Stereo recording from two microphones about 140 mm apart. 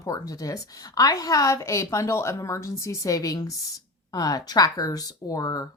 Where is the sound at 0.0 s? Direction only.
25° left (ahead or behind).